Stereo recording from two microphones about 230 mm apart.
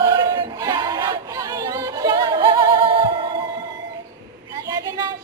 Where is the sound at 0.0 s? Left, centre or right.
Centre.